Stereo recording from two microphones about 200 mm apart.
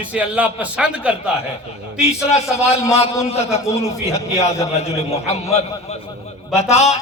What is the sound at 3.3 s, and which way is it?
Speech, 30° left (ahead or behind).